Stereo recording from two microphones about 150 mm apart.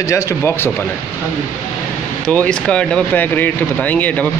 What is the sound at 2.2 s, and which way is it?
Speech, 10° left (ahead or behind).